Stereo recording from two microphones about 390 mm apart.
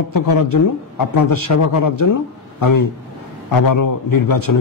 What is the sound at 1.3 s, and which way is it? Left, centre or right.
A man's voice, left.